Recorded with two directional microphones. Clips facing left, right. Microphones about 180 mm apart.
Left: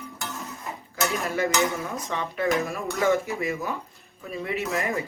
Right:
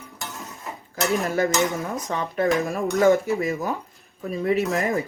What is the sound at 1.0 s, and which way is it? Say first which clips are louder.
Dishes: right 4 dB; 35° right (ahead or behind).